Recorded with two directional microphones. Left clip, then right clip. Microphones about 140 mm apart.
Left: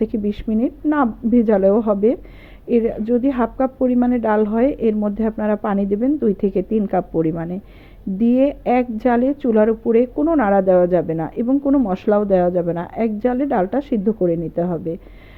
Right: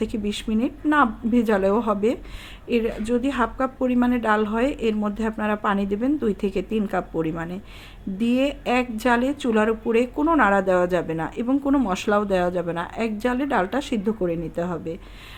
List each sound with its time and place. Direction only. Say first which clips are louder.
0.0 s a woman's voice: left 5 dB; 40° left (ahead or behind)
11.4 s a woman's voice: left 4 dB; 25° left (ahead or behind)